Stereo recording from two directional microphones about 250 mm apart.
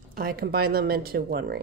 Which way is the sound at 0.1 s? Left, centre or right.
Right.